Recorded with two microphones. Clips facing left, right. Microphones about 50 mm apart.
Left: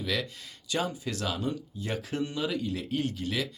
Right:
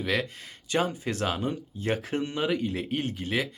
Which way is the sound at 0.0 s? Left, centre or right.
Right.